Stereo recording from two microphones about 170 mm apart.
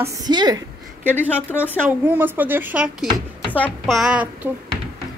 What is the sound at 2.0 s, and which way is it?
A child's voice, 10° right (ahead or behind).